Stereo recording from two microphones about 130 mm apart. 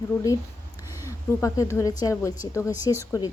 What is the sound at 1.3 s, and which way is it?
Speech, 25° left (ahead or behind).